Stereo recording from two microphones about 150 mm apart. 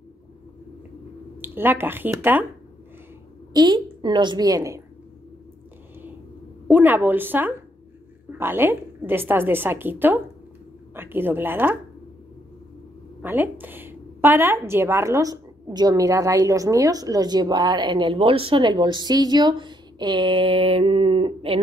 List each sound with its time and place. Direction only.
1.4 s a woman's voice: 15° right (ahead or behind)
3.5 s a woman's voice: 25° right (ahead or behind)
6.7 s a woman's voice: 15° right (ahead or behind)
13.2 s a woman's voice: 15° right (ahead or behind); by 21.5 s 40° right (ahead or behind)